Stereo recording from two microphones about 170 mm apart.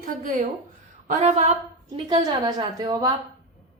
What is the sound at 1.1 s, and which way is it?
Speech, 40° right (ahead or behind).